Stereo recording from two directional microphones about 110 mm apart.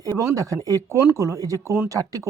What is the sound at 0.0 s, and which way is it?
A woman's voice, 30° right (ahead or behind).